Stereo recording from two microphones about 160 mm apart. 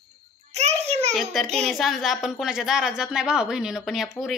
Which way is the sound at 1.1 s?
Centre (ahead or behind).